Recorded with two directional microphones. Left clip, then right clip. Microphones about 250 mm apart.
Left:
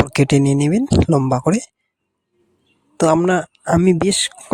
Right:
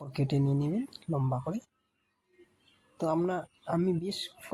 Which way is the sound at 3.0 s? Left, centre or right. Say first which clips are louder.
Left 15 dB; left.